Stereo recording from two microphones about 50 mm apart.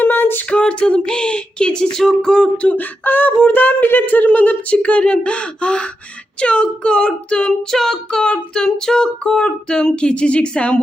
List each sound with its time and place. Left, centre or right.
0.0 s a capella: left
0.5 s child singing: left
2.7 s speech: left; by 7.5 s centre
7.7 s child singing: centre